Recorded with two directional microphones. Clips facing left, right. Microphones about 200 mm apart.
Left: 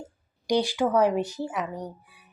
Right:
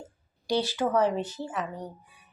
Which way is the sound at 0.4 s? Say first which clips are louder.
Left 3 dB; 15° left (ahead or behind).